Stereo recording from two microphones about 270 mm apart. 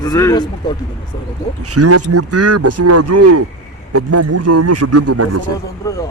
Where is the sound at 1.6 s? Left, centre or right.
Right.